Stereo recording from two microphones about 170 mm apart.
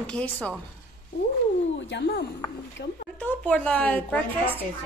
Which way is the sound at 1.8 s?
90° left.